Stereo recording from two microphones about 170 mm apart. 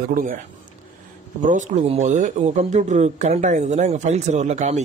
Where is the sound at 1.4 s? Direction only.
45° right (ahead or behind).